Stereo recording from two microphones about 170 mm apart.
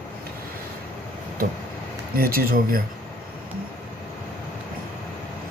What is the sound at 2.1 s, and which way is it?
Speech, 60° right (ahead or behind).